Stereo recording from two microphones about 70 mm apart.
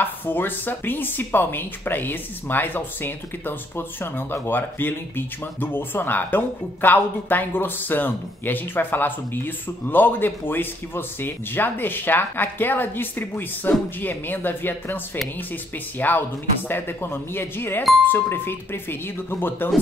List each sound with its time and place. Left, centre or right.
0.0 s a woman's voice: left
16.0 s a woman's voice: left